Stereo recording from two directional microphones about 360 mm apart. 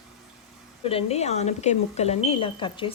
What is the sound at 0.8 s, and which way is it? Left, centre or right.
Speech, centre.